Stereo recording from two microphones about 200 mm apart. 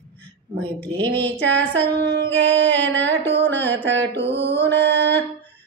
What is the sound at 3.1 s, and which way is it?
Mantra, 60° right (ahead or behind).